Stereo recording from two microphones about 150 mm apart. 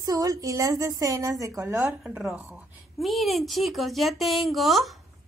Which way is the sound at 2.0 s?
5° right (ahead or behind).